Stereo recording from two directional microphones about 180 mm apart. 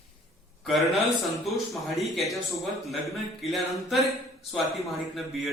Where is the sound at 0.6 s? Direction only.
Centre (ahead or behind).